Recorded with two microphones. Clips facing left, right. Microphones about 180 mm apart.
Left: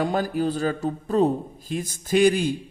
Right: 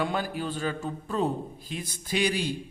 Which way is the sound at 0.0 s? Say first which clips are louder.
Left 6 dB; 45° left (ahead or behind).